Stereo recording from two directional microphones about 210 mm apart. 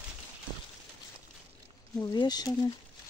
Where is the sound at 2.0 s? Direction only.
20° left (ahead or behind).